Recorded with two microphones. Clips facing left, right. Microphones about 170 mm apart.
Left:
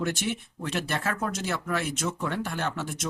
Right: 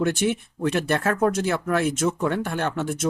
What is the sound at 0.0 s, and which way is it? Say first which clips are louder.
Speech: right 7 dB; 55° right (ahead or behind).